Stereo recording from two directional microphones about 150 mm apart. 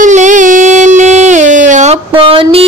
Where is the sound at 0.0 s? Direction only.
55° right (ahead or behind).